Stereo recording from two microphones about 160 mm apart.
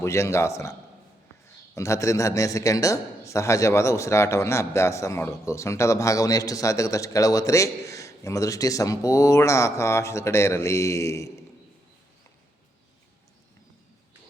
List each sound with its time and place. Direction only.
0.0 s a man's voice: 20° left (ahead or behind)